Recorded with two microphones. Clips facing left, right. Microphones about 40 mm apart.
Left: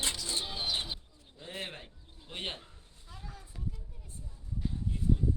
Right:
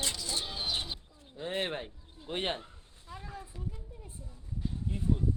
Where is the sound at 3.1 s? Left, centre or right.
Right.